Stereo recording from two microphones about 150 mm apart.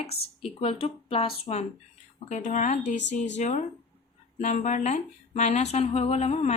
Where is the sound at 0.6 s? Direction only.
40° left (ahead or behind).